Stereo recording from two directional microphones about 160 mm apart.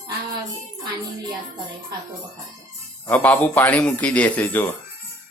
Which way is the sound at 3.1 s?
10° left (ahead or behind).